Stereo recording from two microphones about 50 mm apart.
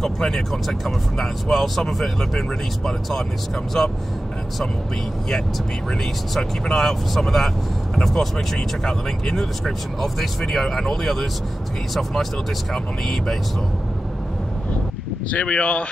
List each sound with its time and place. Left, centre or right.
0.0 s speech: centre
6.3 s speech: centre
15.4 s speech: left